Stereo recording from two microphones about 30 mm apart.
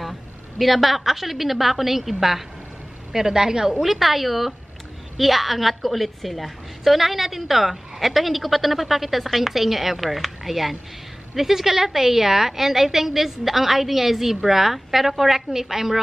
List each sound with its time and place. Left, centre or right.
0.6 s a woman's voice: centre
3.1 s a woman's voice: centre
3.8 s a woman's voice: centre